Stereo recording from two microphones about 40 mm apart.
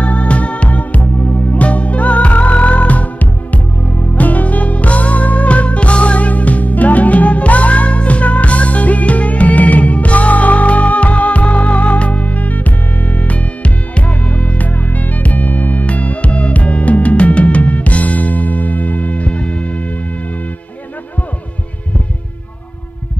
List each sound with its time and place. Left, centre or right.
0.0 s music: left